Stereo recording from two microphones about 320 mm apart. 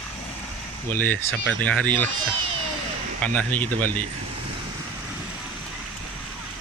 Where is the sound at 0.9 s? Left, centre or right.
Centre.